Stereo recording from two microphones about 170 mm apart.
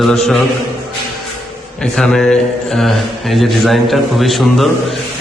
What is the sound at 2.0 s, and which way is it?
Speech, 5° left (ahead or behind).